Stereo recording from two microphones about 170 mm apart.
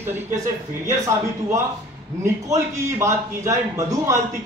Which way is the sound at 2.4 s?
20° right (ahead or behind).